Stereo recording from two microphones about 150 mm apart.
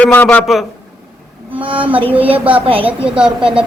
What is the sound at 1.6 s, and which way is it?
A woman's voice, 35° right (ahead or behind).